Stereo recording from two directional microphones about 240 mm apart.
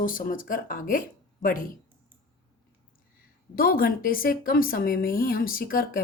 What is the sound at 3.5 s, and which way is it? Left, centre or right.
A woman's voice, left.